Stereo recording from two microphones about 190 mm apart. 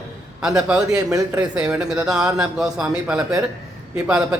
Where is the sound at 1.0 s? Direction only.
20° right (ahead or behind).